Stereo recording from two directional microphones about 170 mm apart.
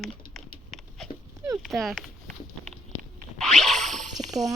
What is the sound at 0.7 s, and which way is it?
Dog, centre (ahead or behind).